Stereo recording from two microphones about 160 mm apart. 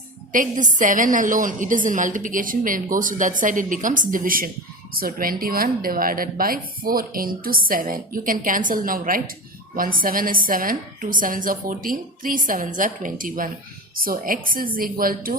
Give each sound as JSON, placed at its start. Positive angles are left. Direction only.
{"t": 0.3, "sound": "a woman's voice", "side_deg": -55}